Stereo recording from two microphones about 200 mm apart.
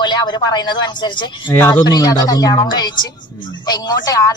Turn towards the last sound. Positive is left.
turn(degrees=20)  # may be behind; listen again after turning